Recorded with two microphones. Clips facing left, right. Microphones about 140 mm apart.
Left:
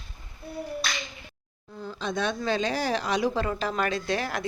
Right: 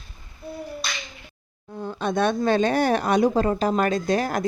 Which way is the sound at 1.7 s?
55° right (ahead or behind).